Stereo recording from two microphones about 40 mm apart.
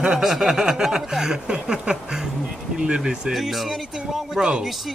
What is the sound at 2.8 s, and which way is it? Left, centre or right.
Speech, centre.